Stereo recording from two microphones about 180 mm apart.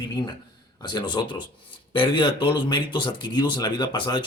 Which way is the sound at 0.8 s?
25° left (ahead or behind).